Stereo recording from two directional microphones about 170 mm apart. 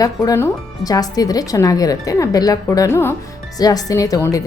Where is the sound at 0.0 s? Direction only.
20° left (ahead or behind).